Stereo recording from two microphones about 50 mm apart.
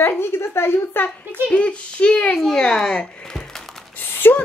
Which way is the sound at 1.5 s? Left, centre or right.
Left.